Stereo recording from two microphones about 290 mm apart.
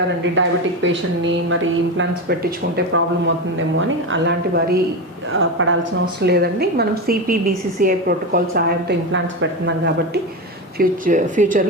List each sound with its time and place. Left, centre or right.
0.3 s a woman's voice: right
2.0 s a woman's voice: right
6.2 s a woman's voice: right
10.8 s speech: right